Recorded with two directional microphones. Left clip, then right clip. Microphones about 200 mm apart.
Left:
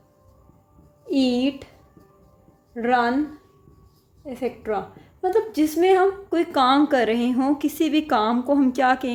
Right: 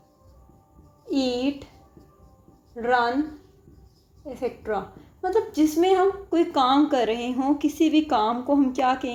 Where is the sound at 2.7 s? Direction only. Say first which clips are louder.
Left 1 dB; 35° left (ahead or behind).